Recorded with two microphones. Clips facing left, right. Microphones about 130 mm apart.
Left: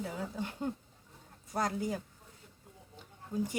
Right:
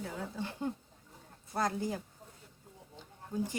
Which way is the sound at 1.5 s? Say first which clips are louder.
Right 1 dB; 15° left (ahead or behind).